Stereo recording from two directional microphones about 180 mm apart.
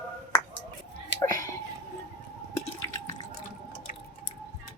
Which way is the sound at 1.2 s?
20° left (ahead or behind).